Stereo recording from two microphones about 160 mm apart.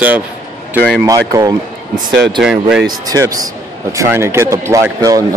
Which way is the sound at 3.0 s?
20° right (ahead or behind).